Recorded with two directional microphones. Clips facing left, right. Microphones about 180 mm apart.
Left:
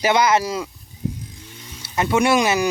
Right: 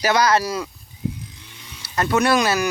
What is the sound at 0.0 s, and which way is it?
Speech, 20° left (ahead or behind).